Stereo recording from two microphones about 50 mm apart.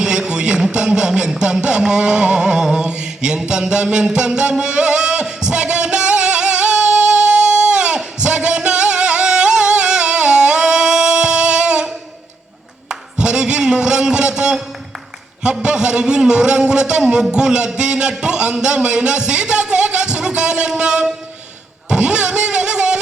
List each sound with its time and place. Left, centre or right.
0.0 s speech: centre
2.7 s mantra: centre
3.6 s music: centre
12.9 s a sound: centre
15.4 s a man's voice: centre
21.8 s a sound: centre